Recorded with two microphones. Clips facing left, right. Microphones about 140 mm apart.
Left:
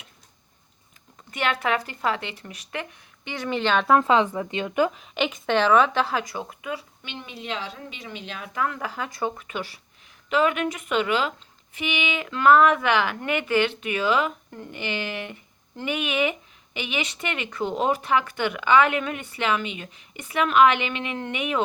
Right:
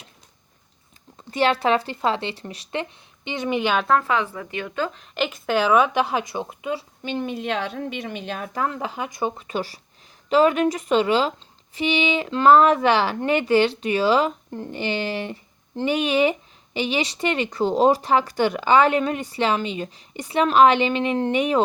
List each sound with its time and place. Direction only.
1.3 s speech: 30° right (ahead or behind); by 3.8 s 10° right (ahead or behind)
4.0 s speech: 20° left (ahead or behind)
4.9 s a woman's voice: centre (ahead or behind); by 6.8 s 25° right (ahead or behind)
7.0 s a woman's voice: 45° right (ahead or behind)
8.5 s speech: 30° right (ahead or behind)